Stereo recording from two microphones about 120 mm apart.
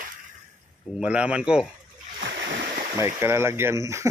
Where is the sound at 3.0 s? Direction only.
20° right (ahead or behind).